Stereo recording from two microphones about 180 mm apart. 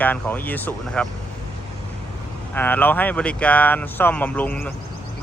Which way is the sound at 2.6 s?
10° left (ahead or behind).